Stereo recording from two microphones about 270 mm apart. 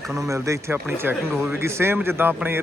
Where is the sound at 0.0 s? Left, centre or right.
Centre.